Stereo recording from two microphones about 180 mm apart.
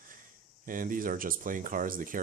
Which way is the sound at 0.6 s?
50° right (ahead or behind).